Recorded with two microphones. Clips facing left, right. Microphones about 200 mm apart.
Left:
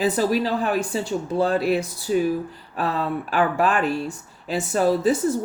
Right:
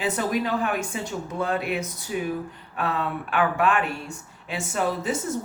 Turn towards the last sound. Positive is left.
turn(degrees=35)  # may be behind; listen again after turning